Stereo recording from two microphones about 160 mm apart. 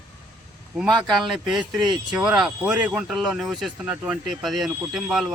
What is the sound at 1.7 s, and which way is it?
Speech, 25° right (ahead or behind).